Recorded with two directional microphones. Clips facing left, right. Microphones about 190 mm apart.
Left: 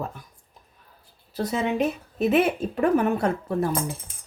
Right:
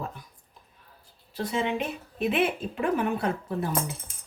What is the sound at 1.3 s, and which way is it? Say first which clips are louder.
A woman's voice: left 3 dB; 40° left (ahead or behind).